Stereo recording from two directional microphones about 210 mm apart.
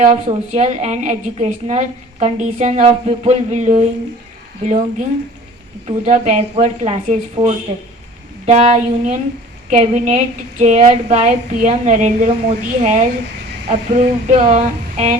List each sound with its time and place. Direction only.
0.0 s a woman's voice: 35° right (ahead or behind)